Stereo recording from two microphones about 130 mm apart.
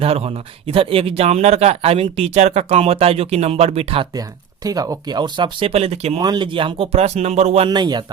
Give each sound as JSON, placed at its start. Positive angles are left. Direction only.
{"t": 0.0, "sound": "speech", "side_deg": -50}
{"t": 4.6, "sound": "speech", "side_deg": -30}
{"t": 6.1, "sound": "speech", "side_deg": -30}
{"t": 7.7, "sound": "speech", "side_deg": -35}